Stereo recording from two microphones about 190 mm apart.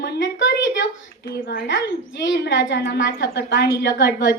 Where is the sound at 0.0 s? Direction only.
65° left (ahead or behind).